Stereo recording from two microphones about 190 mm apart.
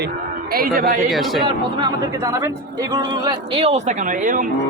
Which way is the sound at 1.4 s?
20° right (ahead or behind).